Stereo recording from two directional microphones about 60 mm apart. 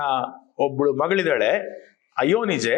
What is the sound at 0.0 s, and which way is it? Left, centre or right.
A man's voice, centre.